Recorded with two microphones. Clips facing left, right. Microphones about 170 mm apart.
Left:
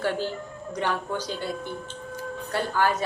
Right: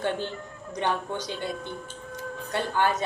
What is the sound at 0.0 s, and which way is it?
Music, 20° right (ahead or behind).